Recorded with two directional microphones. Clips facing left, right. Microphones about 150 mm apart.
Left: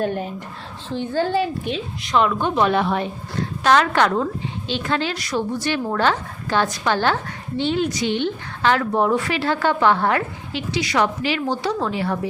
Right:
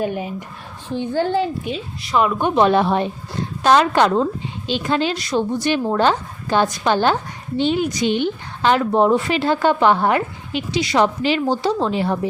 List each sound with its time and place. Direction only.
0.0 s a woman's voice: 5° right (ahead or behind)
1.7 s a woman's voice: 5° right (ahead or behind)
2.6 s a woman's voice: 30° right (ahead or behind)
3.6 s a woman's voice: 20° right (ahead or behind)